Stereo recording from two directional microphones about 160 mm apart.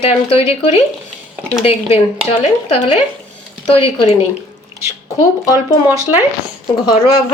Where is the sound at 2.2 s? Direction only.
40° left (ahead or behind).